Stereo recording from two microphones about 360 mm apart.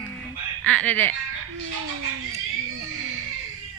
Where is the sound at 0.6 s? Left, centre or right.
Centre.